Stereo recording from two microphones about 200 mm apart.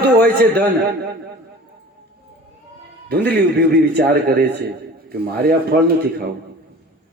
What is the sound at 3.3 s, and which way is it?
A man's voice, 55° right (ahead or behind).